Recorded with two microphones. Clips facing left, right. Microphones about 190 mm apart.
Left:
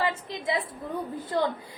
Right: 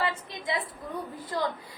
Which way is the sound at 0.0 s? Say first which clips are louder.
Left 3 dB; 25° left (ahead or behind).